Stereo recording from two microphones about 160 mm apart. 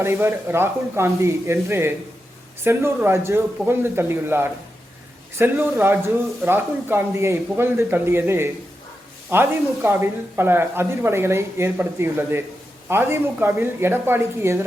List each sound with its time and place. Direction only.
0.0 s speech: 15° right (ahead or behind)